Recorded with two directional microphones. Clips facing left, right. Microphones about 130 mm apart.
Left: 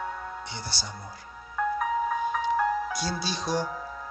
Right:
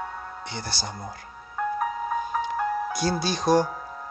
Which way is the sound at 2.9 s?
50° right (ahead or behind).